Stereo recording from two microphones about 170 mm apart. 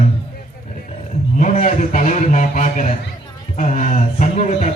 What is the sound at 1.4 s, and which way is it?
A man's voice, 50° left (ahead or behind).